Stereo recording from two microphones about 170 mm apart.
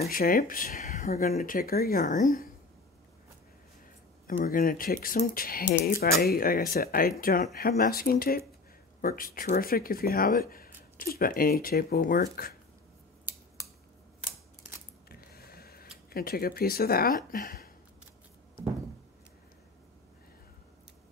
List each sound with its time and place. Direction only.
0.1 s speech: 55° left (ahead or behind)
4.3 s speech: 55° left (ahead or behind)
15.0 s a sound: 60° left (ahead or behind)
16.1 s speech: 60° left (ahead or behind)